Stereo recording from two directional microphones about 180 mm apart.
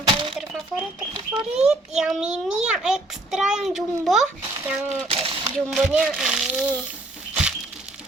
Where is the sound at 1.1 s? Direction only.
25° right (ahead or behind).